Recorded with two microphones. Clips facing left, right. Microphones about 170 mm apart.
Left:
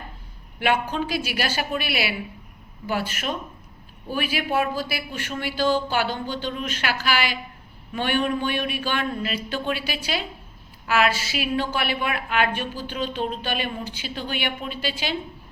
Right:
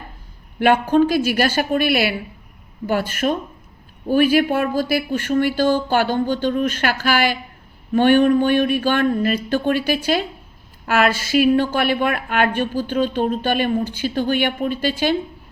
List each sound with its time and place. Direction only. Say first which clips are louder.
0.6 s a woman's voice: right 9 dB; 50° right (ahead or behind)